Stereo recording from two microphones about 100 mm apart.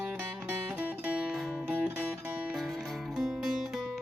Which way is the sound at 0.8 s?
15° right (ahead or behind).